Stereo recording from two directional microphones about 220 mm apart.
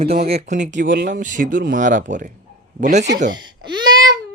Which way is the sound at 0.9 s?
45° right (ahead or behind).